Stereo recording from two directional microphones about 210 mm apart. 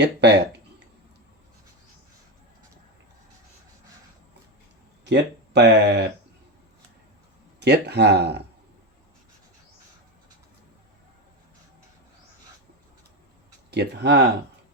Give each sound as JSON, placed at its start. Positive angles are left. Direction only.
{"t": 0.0, "sound": "a sound", "side_deg": -55}
{"t": 5.0, "sound": "speech", "side_deg": -55}
{"t": 7.6, "sound": "speech", "side_deg": -55}
{"t": 13.7, "sound": "speech", "side_deg": -55}